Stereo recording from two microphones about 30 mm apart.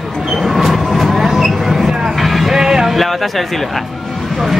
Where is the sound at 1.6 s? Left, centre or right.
Centre.